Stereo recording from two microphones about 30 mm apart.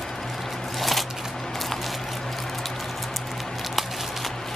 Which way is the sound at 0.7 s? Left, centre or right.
Centre.